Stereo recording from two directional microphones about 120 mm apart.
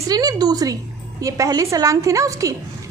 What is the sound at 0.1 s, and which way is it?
A woman's voice, 35° right (ahead or behind).